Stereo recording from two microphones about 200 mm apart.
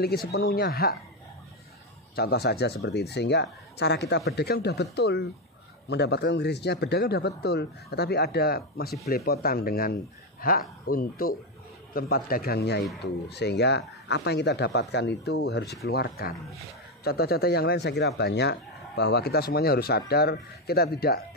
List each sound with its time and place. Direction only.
0.3 s speech: 55° left (ahead or behind)
2.1 s speech: 50° left (ahead or behind)